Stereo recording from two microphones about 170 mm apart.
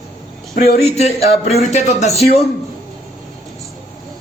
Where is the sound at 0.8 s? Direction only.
40° left (ahead or behind).